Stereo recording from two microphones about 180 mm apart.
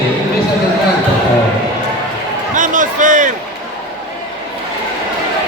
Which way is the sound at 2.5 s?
45° right (ahead or behind).